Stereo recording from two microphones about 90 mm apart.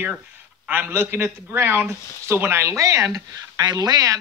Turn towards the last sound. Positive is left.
turn(degrees=-45)  # may be behind; listen again after turning